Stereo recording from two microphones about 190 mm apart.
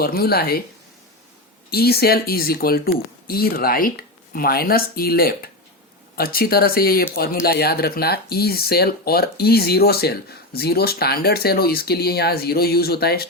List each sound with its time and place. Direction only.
0.0 s speech: 55° left (ahead or behind)
1.7 s speech: 55° left (ahead or behind)